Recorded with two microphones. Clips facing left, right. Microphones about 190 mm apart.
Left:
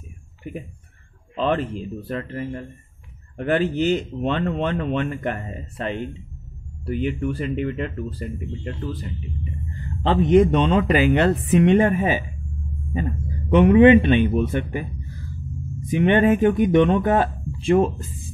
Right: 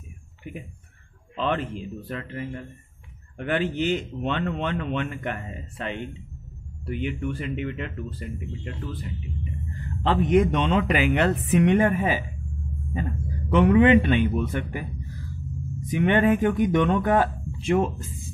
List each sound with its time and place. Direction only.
1.3 s speech: 40° left (ahead or behind)
10.0 s speech: 25° left (ahead or behind)
13.5 s speech: 20° left (ahead or behind)
15.9 s speech: 25° left (ahead or behind)